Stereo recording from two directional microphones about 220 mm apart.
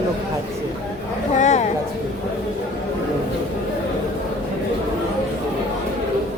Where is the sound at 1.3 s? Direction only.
30° left (ahead or behind).